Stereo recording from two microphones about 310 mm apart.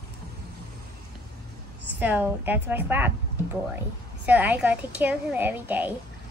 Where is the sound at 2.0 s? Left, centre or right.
Centre.